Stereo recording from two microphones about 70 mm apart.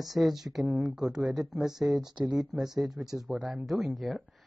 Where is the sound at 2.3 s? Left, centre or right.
Centre.